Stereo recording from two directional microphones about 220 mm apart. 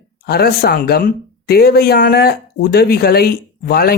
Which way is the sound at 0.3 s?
45° left (ahead or behind).